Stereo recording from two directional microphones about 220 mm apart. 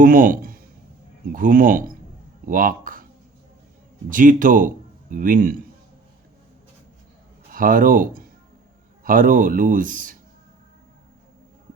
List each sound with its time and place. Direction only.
0.0 s speech: 40° right (ahead or behind)
4.1 s speech: 40° right (ahead or behind)
7.5 s speech: 40° right (ahead or behind)